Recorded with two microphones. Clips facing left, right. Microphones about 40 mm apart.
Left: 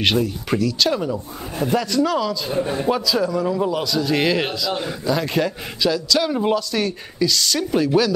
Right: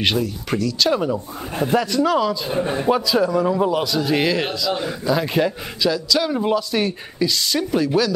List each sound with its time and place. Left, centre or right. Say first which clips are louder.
0.0 s a man's voice: left 1 dB; centre
0.9 s a man's voice: right 2 dB; centre
4.2 s a man's voice: even; centre
6.8 s a man's voice: even; centre
7.7 s a man's voice: left 1 dB; centre